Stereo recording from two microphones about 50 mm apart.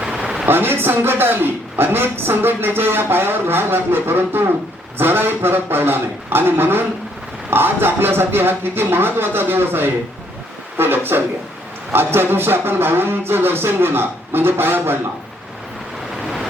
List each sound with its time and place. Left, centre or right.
0.4 s music: right
16.2 s vehicle: centre